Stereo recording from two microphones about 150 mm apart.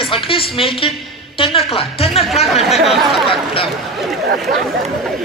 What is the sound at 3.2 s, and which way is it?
Speech, 35° left (ahead or behind).